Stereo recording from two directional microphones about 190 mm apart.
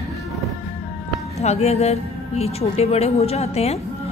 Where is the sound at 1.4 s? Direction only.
35° left (ahead or behind).